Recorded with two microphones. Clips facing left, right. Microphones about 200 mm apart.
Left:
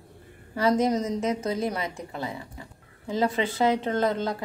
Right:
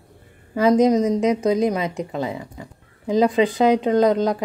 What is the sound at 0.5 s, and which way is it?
A woman's voice, 15° right (ahead or behind).